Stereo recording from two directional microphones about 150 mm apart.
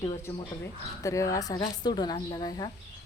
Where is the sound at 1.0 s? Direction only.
20° left (ahead or behind).